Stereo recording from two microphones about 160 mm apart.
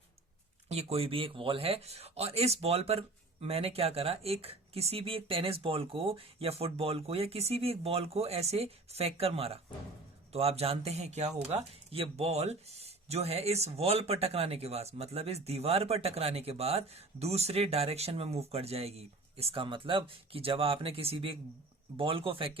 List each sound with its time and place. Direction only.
0.7 s speech: 40° right (ahead or behind)